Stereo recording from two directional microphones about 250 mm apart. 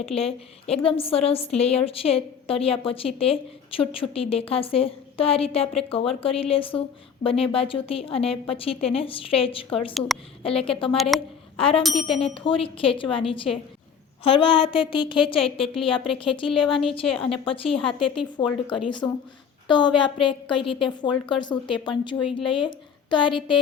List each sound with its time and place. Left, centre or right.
0.1 s a woman's voice: left
11.1 s a woman's voice: centre
11.5 s a woman's voice: left